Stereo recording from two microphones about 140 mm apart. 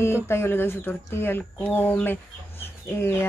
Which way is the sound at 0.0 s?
15° left (ahead or behind).